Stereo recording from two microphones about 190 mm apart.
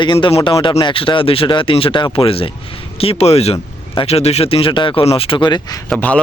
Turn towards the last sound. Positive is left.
turn(degrees=5)  # may be behind; listen again after turning